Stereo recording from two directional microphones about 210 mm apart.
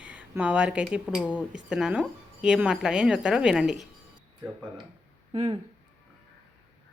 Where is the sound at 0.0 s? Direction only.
5° right (ahead or behind).